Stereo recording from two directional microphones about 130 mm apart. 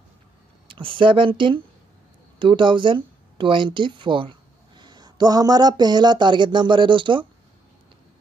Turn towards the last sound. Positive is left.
turn(degrees=-40)  # may be behind; listen again after turning